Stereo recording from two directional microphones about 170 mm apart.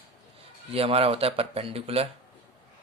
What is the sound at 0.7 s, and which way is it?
A man's voice, 35° right (ahead or behind).